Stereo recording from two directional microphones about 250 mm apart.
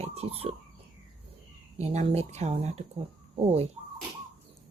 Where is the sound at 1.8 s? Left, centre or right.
Right.